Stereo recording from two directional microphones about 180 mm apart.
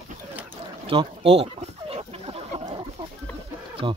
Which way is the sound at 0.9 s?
30° right (ahead or behind).